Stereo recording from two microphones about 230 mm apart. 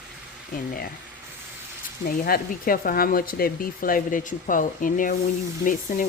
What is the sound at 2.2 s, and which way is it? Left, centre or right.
Speech, left.